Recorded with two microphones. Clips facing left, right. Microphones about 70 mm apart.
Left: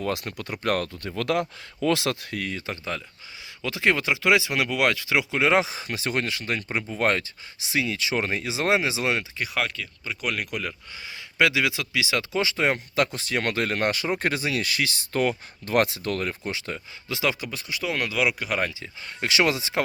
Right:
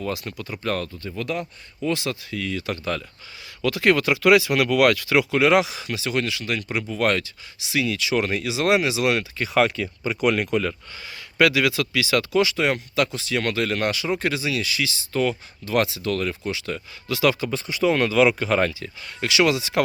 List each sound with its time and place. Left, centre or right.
0.0 s speech: left
2.5 s speech: left
3.6 s speech: centre
9.6 s speech: centre
10.2 s speech: centre
11.3 s speech: centre; by 16.7 s left
16.7 s speech: centre
17.4 s speech: centre
19.3 s speech: left